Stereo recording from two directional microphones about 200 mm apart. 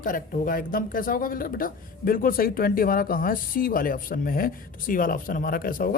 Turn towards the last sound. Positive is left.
turn(degrees=45)  # may be behind; listen again after turning